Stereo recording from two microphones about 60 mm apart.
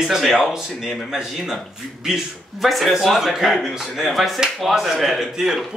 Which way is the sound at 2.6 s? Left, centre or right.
Centre.